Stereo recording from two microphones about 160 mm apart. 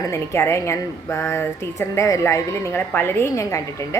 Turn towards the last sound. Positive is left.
turn(degrees=20)  # may be behind; listen again after turning